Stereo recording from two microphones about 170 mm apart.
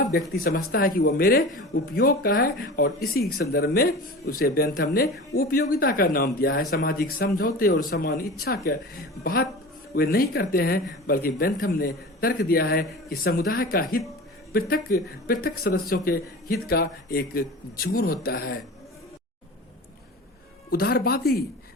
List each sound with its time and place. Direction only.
0.4 s speech: 60° left (ahead or behind)
20.7 s speech: 65° left (ahead or behind)